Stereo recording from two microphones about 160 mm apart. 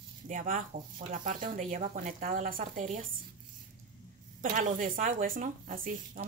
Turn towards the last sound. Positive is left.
turn(degrees=-55)  # may be behind; listen again after turning